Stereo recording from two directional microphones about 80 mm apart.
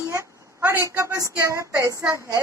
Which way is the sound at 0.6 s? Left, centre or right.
Right.